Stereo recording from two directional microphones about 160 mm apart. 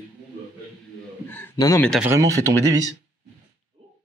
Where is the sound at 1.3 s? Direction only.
15° left (ahead or behind).